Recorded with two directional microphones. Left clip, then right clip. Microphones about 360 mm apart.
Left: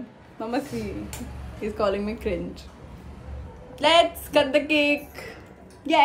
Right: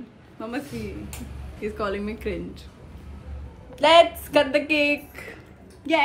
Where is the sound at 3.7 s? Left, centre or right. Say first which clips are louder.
Right 3 dB; centre.